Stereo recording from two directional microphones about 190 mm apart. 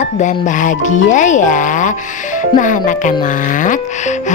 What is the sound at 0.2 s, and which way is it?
Speech, 40° left (ahead or behind).